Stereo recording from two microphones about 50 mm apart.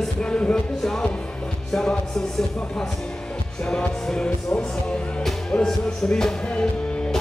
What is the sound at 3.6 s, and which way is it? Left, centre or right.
Music, centre.